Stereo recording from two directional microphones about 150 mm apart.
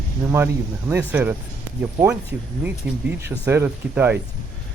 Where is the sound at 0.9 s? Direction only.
10° right (ahead or behind).